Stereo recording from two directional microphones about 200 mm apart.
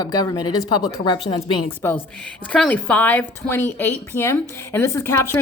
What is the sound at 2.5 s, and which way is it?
A woman's voice, 5° left (ahead or behind).